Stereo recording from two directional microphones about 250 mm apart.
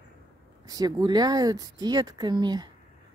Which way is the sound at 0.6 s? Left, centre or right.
Centre.